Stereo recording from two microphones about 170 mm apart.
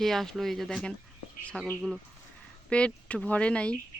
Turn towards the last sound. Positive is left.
turn(degrees=5)  # may be behind; listen again after turning